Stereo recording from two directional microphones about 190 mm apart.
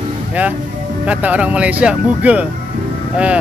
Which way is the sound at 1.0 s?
10° right (ahead or behind).